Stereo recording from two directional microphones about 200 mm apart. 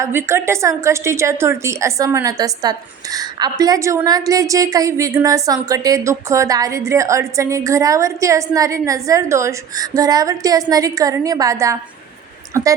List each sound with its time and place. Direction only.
0.0 s a woman's voice: 10° right (ahead or behind)